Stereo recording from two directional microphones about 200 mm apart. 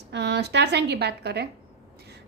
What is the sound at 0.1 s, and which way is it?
A woman's voice, 55° right (ahead or behind).